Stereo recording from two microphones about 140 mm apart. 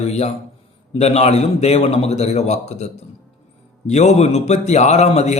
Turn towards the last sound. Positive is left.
turn(degrees=50)  # may be behind; listen again after turning